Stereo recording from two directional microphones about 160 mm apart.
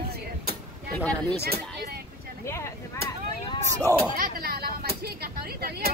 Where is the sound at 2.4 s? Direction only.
20° left (ahead or behind).